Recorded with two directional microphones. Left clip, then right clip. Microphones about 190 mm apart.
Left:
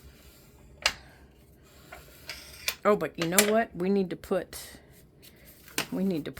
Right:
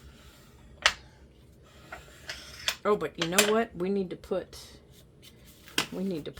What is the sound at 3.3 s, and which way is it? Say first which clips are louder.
Speech: even; 30° left (ahead or behind).